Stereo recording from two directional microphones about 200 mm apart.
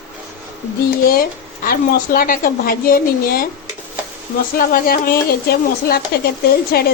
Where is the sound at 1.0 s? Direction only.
45° left (ahead or behind).